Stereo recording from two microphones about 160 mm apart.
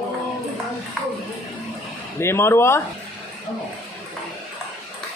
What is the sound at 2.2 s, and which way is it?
Speech, 15° left (ahead or behind).